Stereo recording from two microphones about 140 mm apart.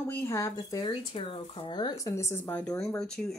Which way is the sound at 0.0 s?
20° left (ahead or behind).